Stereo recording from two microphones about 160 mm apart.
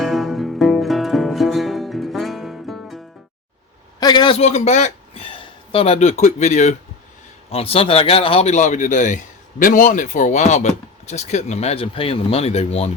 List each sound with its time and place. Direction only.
0.0 s music: centre (ahead or behind)
4.0 s a sound: 30° left (ahead or behind); by 5.3 s 45° left (ahead or behind)
5.3 s speech: 35° left (ahead or behind)